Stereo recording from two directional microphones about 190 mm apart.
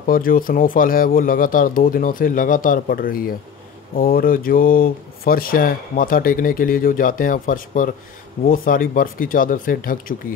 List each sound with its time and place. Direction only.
0.0 s speech: 50° left (ahead or behind)